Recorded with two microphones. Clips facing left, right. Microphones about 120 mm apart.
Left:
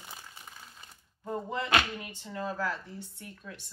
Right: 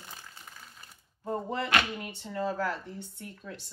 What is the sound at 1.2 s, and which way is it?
Speech, 35° right (ahead or behind).